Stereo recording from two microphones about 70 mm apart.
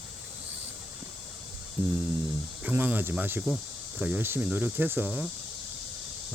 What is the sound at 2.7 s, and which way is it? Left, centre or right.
Cricket, right.